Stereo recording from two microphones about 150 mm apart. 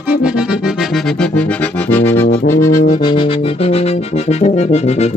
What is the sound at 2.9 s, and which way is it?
Music, 30° left (ahead or behind).